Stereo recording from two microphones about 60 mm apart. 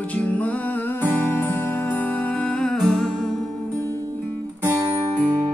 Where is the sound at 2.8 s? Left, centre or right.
Centre.